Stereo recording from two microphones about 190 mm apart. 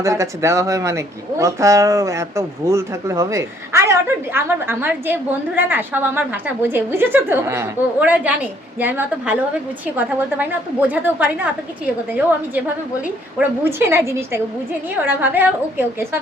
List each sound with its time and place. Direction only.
0.0 s speech: 15° right (ahead or behind)
13.7 s speech: 10° right (ahead or behind)